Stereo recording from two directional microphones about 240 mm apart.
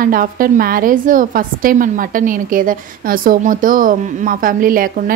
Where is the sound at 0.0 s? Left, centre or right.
Right.